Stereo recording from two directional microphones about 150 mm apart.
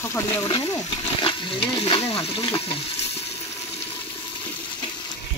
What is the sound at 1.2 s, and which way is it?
Speech, 35° left (ahead or behind).